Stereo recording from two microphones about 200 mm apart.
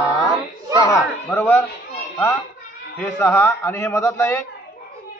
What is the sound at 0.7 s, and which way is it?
Speech, 15° left (ahead or behind).